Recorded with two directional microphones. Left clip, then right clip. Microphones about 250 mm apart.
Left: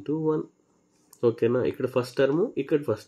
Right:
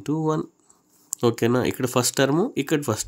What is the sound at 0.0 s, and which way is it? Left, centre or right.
Speech, right.